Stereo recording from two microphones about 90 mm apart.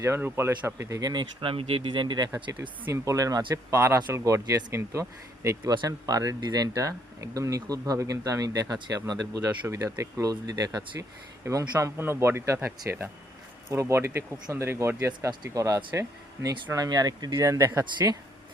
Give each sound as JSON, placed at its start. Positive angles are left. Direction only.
{"t": 0.2, "sound": "speech", "side_deg": -25}
{"t": 0.8, "sound": "speech", "side_deg": -40}
{"t": 1.1, "sound": "speech", "side_deg": -65}
{"t": 2.3, "sound": "speech", "side_deg": -30}
{"t": 11.0, "sound": "speech", "side_deg": -35}